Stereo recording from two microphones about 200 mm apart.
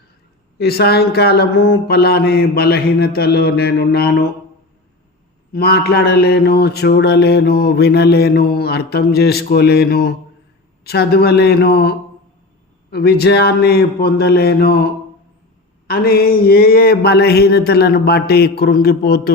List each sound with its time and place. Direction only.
0.6 s mantra: 50° left (ahead or behind)
5.5 s mantra: 50° left (ahead or behind)
15.9 s mantra: 50° left (ahead or behind)